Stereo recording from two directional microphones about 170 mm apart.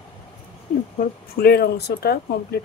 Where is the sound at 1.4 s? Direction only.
70° left (ahead or behind).